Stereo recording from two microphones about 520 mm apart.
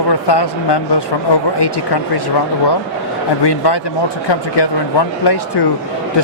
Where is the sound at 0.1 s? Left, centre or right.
Left.